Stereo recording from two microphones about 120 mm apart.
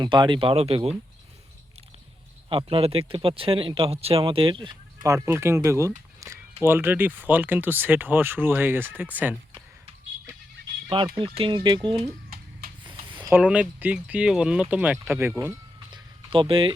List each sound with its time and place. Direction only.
0.0 s speech: 40° right (ahead or behind)
2.5 s speech: 50° right (ahead or behind)
5.0 s speech: 25° right (ahead or behind)
6.1 s a sound: 25° right (ahead or behind)
6.7 s speech: 15° right (ahead or behind)
10.8 s speech: 45° right (ahead or behind)
12.9 s a sound: 45° right (ahead or behind)
13.3 s speech: 10° right (ahead or behind)
15.9 s a sound: 45° right (ahead or behind)